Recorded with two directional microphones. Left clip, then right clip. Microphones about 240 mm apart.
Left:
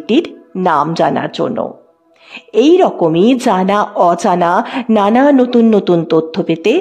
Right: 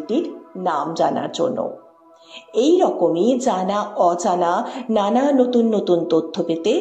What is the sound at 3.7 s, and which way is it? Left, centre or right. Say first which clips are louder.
A woman's voice: left 7 dB; left.